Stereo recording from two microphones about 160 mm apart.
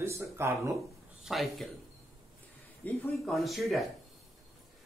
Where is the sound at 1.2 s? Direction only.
Centre (ahead or behind).